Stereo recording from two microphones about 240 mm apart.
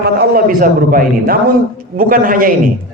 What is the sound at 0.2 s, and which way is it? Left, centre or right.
A man's voice, right.